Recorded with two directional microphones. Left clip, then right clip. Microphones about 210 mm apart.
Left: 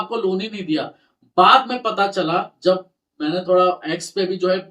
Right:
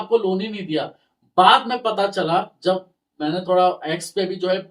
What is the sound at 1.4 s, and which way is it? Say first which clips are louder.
Speech: left 1 dB; 15° left (ahead or behind).